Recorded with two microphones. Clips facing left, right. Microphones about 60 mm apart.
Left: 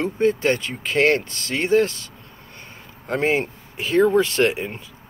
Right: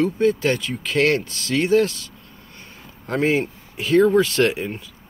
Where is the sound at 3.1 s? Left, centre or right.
Left.